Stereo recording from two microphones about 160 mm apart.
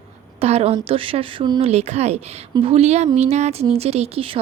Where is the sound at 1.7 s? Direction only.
45° right (ahead or behind).